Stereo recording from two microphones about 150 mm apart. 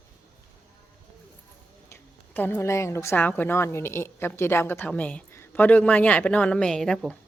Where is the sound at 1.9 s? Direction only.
15° left (ahead or behind).